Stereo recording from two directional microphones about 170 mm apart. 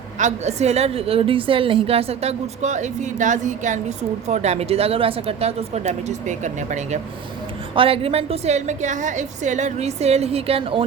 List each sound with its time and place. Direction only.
0.2 s a woman's voice: 45° right (ahead or behind)
7.8 s a woman's voice: 35° right (ahead or behind)